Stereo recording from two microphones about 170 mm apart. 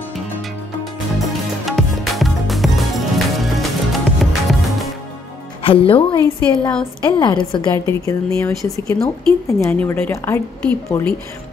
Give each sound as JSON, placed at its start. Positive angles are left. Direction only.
{"t": 1.3, "sound": "music", "side_deg": 0}
{"t": 5.6, "sound": "a woman's voice", "side_deg": 35}